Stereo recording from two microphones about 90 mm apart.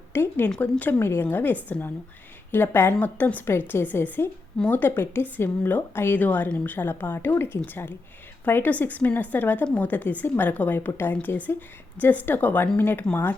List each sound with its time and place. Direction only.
0.1 s a woman's voice: 25° left (ahead or behind)